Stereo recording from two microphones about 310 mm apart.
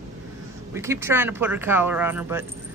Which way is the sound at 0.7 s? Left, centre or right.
Centre.